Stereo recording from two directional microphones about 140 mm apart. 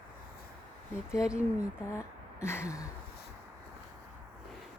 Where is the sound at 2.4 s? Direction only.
20° left (ahead or behind).